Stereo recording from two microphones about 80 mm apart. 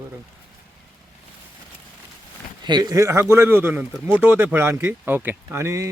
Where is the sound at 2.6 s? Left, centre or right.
Right.